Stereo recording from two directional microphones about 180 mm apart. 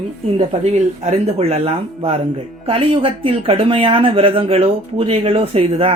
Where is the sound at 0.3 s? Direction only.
35° right (ahead or behind).